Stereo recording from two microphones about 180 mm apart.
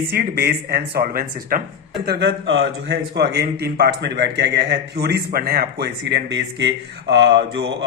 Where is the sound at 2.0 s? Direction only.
70° right (ahead or behind).